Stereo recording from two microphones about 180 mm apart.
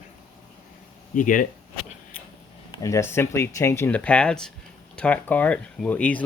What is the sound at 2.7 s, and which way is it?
Speech, 15° left (ahead or behind).